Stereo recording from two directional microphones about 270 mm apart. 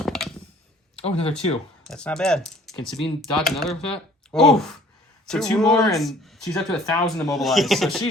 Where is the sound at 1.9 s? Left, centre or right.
Centre.